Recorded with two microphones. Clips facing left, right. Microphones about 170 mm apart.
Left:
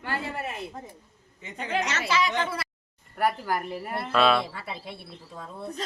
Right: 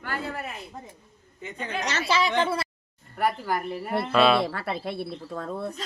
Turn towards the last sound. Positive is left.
turn(degrees=-65)  # may be behind; listen again after turning